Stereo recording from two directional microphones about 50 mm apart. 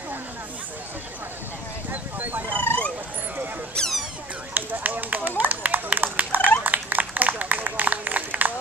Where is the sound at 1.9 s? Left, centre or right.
Right.